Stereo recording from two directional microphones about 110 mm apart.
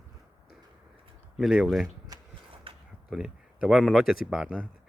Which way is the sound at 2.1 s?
35° right (ahead or behind).